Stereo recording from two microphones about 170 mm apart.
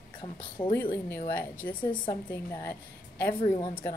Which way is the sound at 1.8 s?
30° left (ahead or behind).